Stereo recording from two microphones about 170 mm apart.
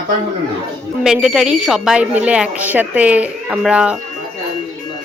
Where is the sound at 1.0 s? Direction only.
5° right (ahead or behind).